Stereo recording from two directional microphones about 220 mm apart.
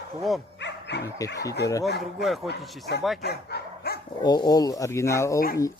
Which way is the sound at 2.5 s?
50° left (ahead or behind).